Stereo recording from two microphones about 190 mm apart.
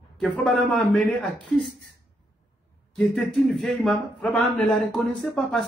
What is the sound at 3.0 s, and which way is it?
A man's voice, centre (ahead or behind).